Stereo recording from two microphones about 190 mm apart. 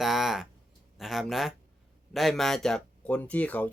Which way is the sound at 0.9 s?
Centre (ahead or behind).